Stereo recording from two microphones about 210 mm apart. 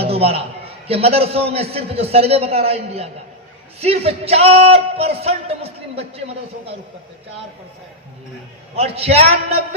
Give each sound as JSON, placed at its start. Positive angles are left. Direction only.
{"t": 0.0, "sound": "a sound", "side_deg": -30}
{"t": 0.9, "sound": "a man's voice", "side_deg": -30}
{"t": 8.7, "sound": "a man's voice", "side_deg": -30}